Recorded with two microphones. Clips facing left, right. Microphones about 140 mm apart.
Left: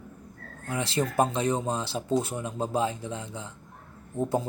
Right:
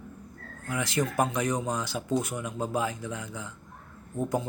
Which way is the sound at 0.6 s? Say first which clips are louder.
Left 1 dB; 30° left (ahead or behind).